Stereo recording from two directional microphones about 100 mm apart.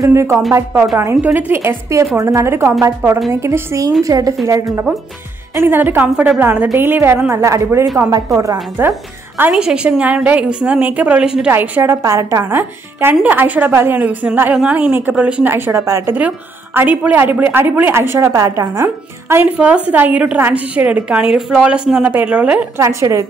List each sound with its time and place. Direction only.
0.0 s a woman's voice: 30° right (ahead or behind)
5.7 s a woman's voice: 20° right (ahead or behind)
8.8 s a woman's voice: 20° right (ahead or behind)
9.5 s speech: 5° right (ahead or behind)
11.5 s a woman's voice: 20° right (ahead or behind)
16.2 s a woman's voice: 15° right (ahead or behind)
18.3 s speech: 35° right (ahead or behind); by 22.7 s 15° right (ahead or behind)
22.8 s a woman's voice: 30° right (ahead or behind)